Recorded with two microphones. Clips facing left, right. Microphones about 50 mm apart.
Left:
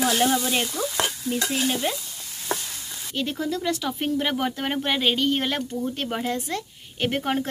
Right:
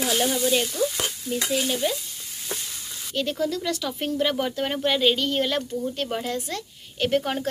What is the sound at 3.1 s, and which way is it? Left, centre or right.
Speech, centre.